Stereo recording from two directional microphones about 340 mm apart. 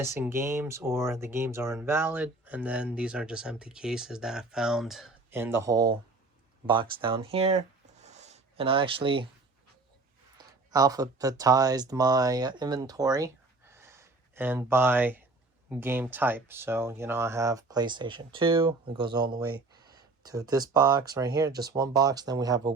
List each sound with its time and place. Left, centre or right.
0.0 s speech: centre
8.0 s a sound: centre
10.3 s speech: centre